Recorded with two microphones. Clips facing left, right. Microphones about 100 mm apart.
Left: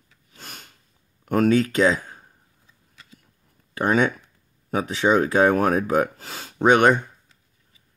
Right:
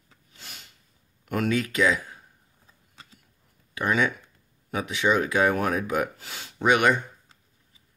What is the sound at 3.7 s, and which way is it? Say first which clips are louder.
Speech: left 4 dB; 40° left (ahead or behind).